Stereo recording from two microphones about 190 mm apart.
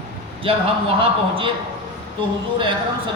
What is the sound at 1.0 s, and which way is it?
Speech, 30° right (ahead or behind).